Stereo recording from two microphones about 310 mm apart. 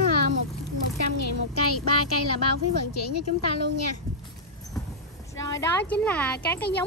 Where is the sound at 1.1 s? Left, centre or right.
Left.